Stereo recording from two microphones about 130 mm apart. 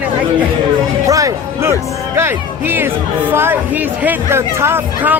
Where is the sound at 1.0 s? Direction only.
25° right (ahead or behind).